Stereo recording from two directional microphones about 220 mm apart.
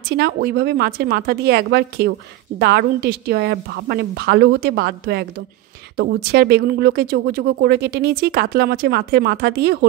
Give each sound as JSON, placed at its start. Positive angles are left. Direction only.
{"t": 0.1, "sound": "speech", "side_deg": -45}